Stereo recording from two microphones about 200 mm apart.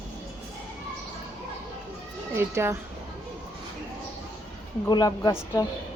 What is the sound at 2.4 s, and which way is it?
Speech, 10° right (ahead or behind).